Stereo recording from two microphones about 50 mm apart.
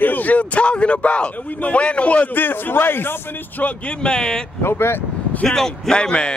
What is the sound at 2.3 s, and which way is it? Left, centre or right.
Speech, left.